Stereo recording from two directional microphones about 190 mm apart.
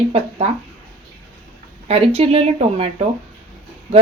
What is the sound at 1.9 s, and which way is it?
A woman's voice, 30° right (ahead or behind).